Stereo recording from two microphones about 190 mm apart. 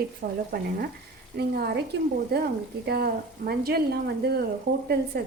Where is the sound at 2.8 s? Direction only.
55° right (ahead or behind).